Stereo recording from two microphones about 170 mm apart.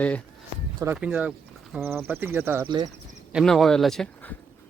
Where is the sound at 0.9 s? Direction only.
5° right (ahead or behind).